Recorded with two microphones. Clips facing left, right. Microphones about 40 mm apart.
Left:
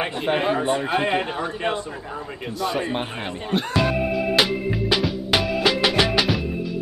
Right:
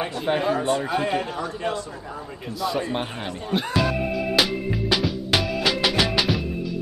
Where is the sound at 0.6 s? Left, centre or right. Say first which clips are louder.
Left 1 dB; left.